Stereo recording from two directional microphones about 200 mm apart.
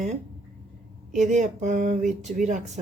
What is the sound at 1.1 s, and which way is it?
Speech, 40° right (ahead or behind).